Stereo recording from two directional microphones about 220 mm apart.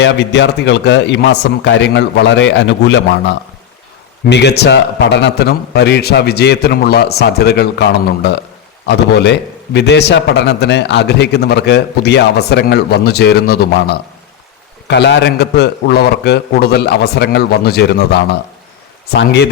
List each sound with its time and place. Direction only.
0.0 s a man's voice: 55° left (ahead or behind)
14.8 s a man's voice: 50° left (ahead or behind)